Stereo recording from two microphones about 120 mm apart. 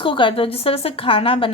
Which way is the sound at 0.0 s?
45° left (ahead or behind).